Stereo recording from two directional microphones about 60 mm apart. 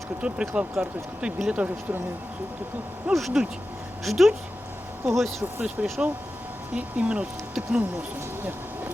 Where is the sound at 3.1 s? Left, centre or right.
Centre.